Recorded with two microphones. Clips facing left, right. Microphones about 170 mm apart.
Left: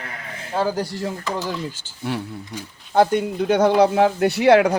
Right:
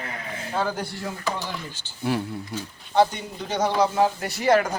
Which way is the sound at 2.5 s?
5° right (ahead or behind).